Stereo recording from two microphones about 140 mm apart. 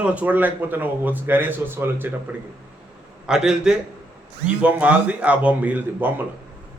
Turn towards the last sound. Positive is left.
turn(degrees=-10)  # may be behind; listen again after turning